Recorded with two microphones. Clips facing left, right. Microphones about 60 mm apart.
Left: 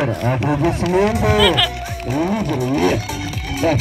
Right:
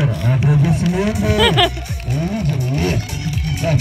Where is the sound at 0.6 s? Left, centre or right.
Left.